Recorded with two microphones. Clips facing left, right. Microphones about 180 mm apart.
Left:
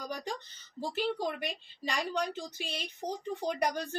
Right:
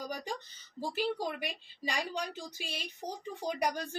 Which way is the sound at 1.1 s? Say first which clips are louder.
Left 2 dB; 55° left (ahead or behind).